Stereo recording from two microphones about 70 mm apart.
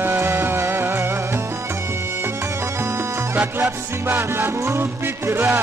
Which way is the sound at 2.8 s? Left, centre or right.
Right.